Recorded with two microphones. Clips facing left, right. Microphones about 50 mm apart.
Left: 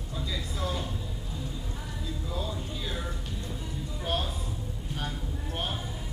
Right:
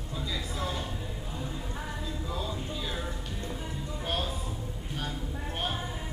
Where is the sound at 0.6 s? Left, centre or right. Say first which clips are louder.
Left 2 dB; centre.